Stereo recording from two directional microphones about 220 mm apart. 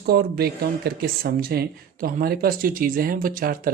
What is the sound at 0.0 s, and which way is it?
Speech, 45° right (ahead or behind).